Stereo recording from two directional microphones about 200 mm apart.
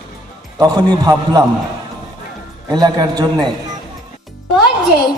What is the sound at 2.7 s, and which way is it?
Speech, 20° right (ahead or behind).